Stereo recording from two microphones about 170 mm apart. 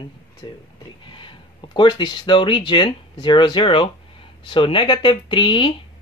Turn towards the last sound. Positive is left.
turn(degrees=30)  # may be behind; listen again after turning